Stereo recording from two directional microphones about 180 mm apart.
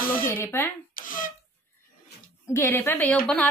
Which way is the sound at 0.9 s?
50° left (ahead or behind).